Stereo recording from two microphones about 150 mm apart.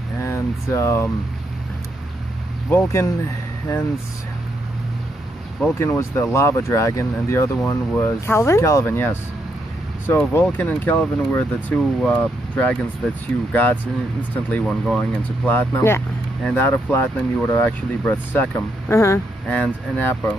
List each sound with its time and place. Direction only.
0.2 s a sound: 15° left (ahead or behind)
2.7 s speech: 20° left (ahead or behind)
5.6 s speech: 15° left (ahead or behind)